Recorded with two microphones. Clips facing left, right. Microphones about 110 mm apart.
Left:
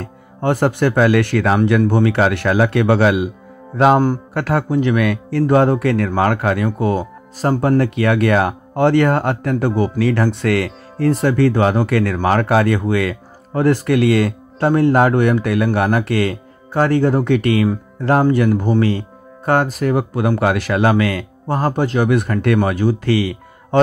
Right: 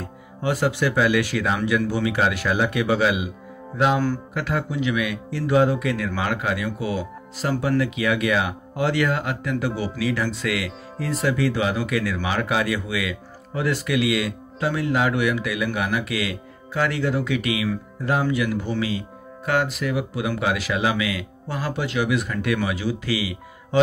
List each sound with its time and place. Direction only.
0.0 s speech: 55° left (ahead or behind)